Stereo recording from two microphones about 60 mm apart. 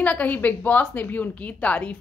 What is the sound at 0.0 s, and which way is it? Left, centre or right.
A woman's voice, left.